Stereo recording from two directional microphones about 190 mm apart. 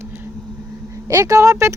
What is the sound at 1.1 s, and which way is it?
Speech, 15° right (ahead or behind).